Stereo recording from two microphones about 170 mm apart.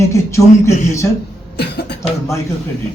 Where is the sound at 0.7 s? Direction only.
40° left (ahead or behind).